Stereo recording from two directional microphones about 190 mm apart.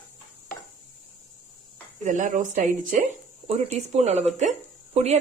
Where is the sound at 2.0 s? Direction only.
40° right (ahead or behind).